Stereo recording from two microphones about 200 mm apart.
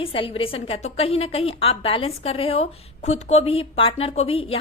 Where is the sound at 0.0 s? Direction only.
25° left (ahead or behind).